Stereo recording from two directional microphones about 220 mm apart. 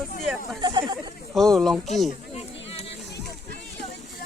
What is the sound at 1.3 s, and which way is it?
Speech, centre (ahead or behind).